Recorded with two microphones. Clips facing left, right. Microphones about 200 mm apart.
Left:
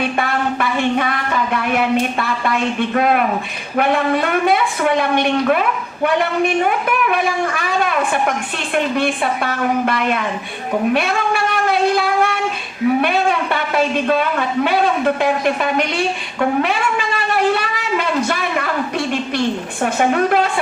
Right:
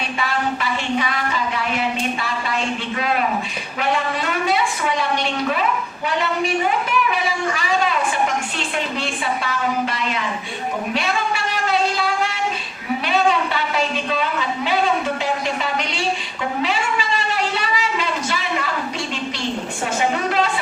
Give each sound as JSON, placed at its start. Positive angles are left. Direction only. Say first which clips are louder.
{"t": 0.0, "sound": "a sound", "louder": "left 4 dB", "side_deg": 55}
{"t": 8.7, "sound": "a woman's voice", "louder": "left 10 dB", "side_deg": 55}
{"t": 19.8, "sound": "a woman's voice", "louder": "left 6 dB", "side_deg": 55}